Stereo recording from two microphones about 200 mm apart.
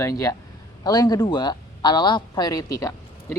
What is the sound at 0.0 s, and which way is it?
Speech, 15° left (ahead or behind).